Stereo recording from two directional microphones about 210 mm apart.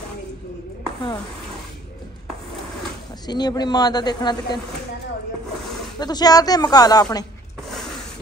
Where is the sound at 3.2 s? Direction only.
20° left (ahead or behind).